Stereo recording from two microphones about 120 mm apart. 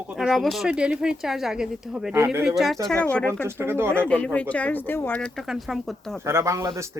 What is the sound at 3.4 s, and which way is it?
Speech, 20° right (ahead or behind).